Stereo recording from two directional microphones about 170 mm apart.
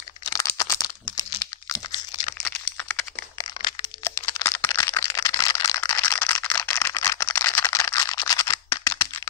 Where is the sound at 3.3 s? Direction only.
25° left (ahead or behind).